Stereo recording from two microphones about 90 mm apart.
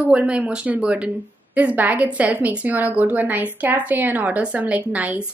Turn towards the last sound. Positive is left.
turn(degrees=-15)  # may be behind; listen again after turning